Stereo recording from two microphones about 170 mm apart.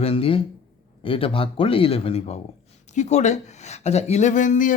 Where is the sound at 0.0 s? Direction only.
35° left (ahead or behind).